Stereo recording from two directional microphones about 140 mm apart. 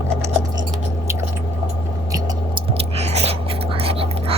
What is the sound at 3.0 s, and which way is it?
Whispering, 50° right (ahead or behind).